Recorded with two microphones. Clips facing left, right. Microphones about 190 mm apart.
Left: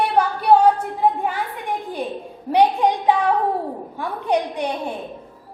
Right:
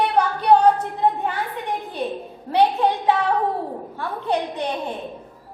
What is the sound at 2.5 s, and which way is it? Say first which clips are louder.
A woman's voice: left 2 dB; 15° left (ahead or behind).